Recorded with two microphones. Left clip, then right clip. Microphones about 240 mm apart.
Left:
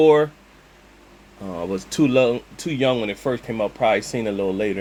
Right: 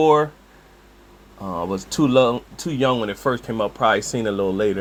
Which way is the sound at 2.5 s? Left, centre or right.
Right.